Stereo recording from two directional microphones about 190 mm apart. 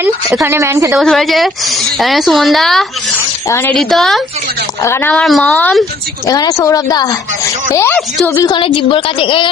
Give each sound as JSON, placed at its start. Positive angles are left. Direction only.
{"t": 0.0, "sound": "speech", "side_deg": -5}
{"t": 0.9, "sound": "speech", "side_deg": 0}
{"t": 3.5, "sound": "speech", "side_deg": 10}
{"t": 3.8, "sound": "speech", "side_deg": 0}
{"t": 4.8, "sound": "speech", "side_deg": 15}
{"t": 6.2, "sound": "speech", "side_deg": 20}
{"t": 7.8, "sound": "speech", "side_deg": 5}
{"t": 8.4, "sound": "a woman's voice", "side_deg": 25}